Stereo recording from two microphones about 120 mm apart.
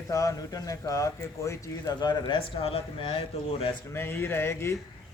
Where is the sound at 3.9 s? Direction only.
20° left (ahead or behind).